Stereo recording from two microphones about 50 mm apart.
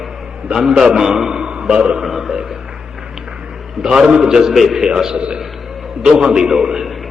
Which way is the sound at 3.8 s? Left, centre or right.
Centre.